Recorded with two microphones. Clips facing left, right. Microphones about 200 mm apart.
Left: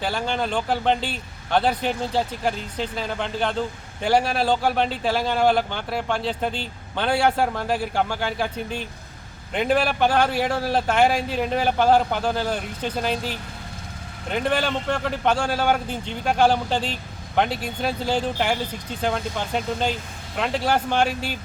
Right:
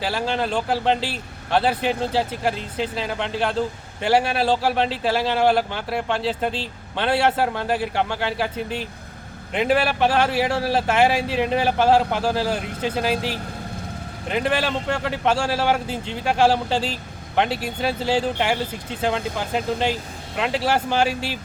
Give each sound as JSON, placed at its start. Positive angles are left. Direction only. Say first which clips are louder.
{"t": 0.0, "sound": "a man's voice", "louder": "right 1 dB", "side_deg": -5}
{"t": 14.3, "sound": "a man's voice", "louder": "right 1 dB", "side_deg": 0}